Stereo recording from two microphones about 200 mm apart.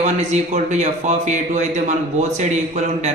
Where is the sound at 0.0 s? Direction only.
35° right (ahead or behind).